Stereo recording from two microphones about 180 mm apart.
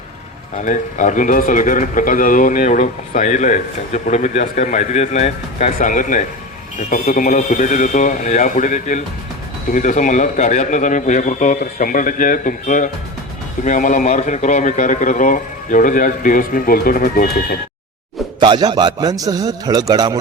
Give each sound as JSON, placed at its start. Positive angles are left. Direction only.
{"t": 0.5, "sound": "speech", "side_deg": 45}
{"t": 18.3, "sound": "a man's voice", "side_deg": -25}